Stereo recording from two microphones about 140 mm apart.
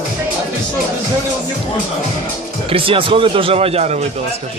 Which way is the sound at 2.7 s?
40° right (ahead or behind).